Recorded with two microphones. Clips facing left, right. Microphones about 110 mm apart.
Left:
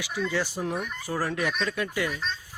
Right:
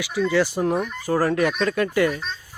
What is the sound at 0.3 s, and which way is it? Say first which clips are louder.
Speech: right 10 dB; 85° right.